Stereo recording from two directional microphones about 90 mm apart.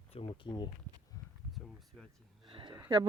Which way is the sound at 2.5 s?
70° right (ahead or behind).